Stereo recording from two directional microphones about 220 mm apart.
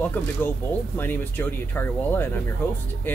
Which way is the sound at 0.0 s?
10° left (ahead or behind).